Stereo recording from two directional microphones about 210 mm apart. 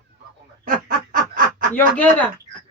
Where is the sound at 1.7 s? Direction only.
10° left (ahead or behind).